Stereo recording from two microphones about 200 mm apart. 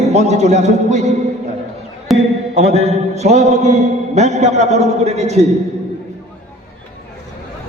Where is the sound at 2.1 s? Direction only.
Centre (ahead or behind).